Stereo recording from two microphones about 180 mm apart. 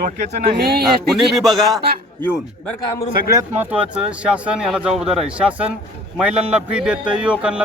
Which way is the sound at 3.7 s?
5° right (ahead or behind).